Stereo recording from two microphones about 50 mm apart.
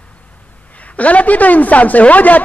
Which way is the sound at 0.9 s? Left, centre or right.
Left.